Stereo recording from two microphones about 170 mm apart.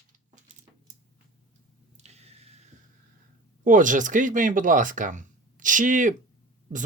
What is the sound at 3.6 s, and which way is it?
Speech, 50° right (ahead or behind).